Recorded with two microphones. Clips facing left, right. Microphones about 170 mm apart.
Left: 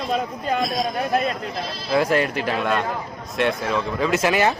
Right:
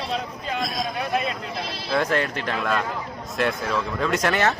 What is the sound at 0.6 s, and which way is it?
Speech, centre (ahead or behind).